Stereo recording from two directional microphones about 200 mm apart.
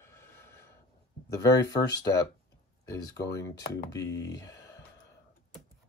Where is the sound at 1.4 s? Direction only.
20° left (ahead or behind).